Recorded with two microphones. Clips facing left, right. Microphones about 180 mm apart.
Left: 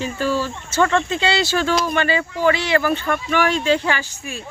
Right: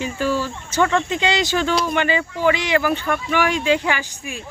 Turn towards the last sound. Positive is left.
turn(degrees=-15)  # may be behind; listen again after turning